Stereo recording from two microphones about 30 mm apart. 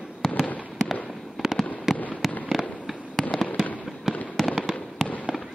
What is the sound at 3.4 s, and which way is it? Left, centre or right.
Fireworks, left.